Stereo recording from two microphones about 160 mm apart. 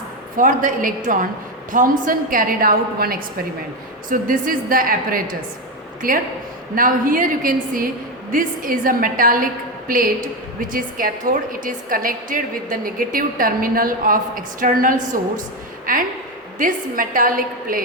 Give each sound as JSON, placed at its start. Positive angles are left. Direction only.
{"t": 0.3, "sound": "a woman's voice", "side_deg": -55}